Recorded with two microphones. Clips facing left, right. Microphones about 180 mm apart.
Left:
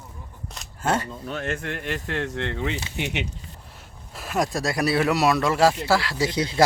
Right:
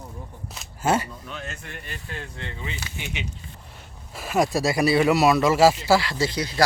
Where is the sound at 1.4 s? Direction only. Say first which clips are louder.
Left 9 dB; 55° left (ahead or behind).